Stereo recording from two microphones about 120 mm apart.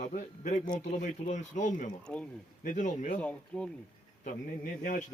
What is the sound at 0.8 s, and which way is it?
A man's voice, 90° left.